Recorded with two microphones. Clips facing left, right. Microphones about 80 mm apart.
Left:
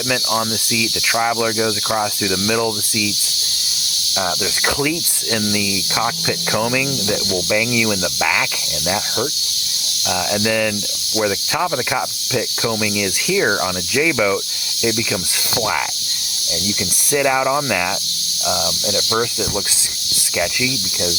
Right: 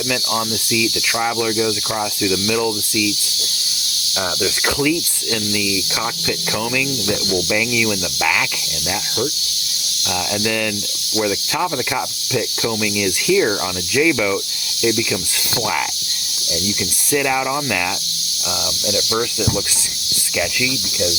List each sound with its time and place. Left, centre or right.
0.1 s speech: centre
4.2 s speech: centre
10.1 s speech: centre
11.1 s snake: centre
14.8 s speech: centre
17.1 s speech: centre
18.9 s speech: left